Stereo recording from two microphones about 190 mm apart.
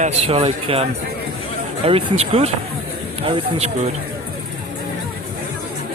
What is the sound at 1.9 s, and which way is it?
A man's voice, 30° right (ahead or behind).